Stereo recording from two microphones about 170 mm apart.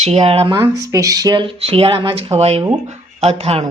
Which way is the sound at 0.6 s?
20° right (ahead or behind).